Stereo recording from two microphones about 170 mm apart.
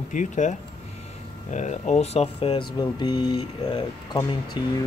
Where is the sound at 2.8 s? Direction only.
25° left (ahead or behind).